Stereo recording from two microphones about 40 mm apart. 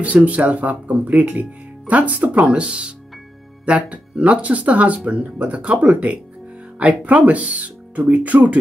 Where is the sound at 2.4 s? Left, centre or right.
Right.